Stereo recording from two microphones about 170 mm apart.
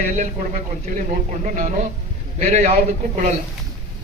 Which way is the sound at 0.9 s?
50° right (ahead or behind).